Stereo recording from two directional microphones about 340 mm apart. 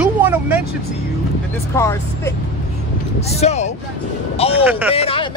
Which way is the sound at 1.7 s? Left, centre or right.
Centre.